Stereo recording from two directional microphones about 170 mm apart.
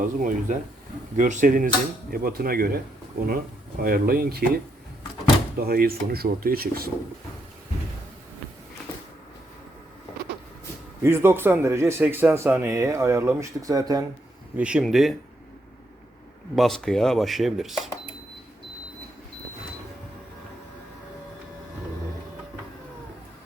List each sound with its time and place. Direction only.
0.0 s speech: 50° right (ahead or behind)
11.0 s speech: 15° right (ahead or behind)
14.5 s speech: 5° right (ahead or behind)
16.6 s speech: centre (ahead or behind)